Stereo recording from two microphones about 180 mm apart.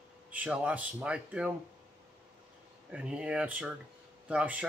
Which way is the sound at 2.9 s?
5° right (ahead or behind).